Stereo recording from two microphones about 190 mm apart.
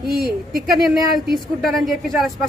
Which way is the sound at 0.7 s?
Centre (ahead or behind).